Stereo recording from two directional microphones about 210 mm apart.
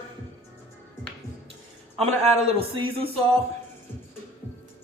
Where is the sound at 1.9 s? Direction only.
30° right (ahead or behind).